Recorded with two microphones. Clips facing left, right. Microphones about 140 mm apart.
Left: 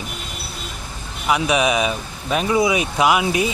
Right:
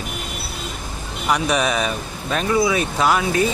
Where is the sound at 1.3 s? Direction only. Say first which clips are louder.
Left 2 dB; 10° left (ahead or behind).